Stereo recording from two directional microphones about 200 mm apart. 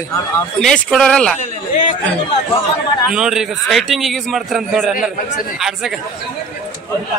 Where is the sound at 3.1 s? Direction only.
5° right (ahead or behind).